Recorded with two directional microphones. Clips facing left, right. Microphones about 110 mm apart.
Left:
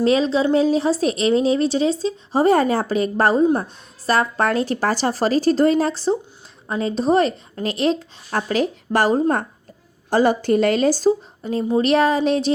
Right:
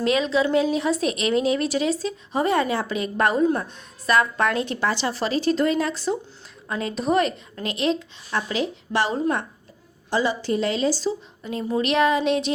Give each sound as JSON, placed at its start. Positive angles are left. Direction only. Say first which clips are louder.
{"t": 0.0, "sound": "speech", "louder": "left 4 dB", "side_deg": 35}